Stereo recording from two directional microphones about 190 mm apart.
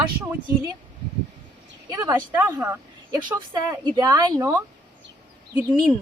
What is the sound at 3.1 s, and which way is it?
Speech, 20° right (ahead or behind).